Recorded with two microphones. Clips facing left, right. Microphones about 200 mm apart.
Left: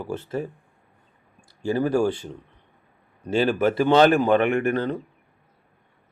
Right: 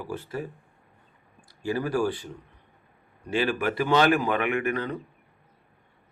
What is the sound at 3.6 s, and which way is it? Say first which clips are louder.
Speech: left 6 dB; 25° left (ahead or behind).